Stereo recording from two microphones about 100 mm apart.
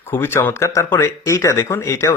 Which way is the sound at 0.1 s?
25° left (ahead or behind).